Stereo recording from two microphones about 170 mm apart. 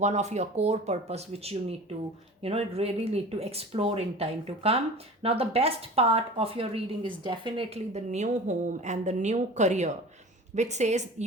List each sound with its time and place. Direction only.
0.0 s a woman's voice: 40° right (ahead or behind)